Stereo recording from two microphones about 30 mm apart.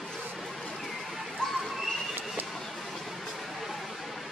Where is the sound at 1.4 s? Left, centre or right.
Left.